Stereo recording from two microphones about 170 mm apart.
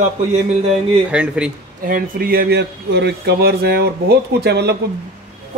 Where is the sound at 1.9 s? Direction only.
60° right (ahead or behind).